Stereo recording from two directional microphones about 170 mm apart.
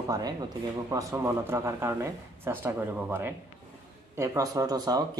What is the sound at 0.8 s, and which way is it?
Speech, 15° right (ahead or behind).